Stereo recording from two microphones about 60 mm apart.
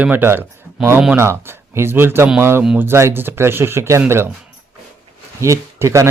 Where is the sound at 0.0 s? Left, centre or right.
Right.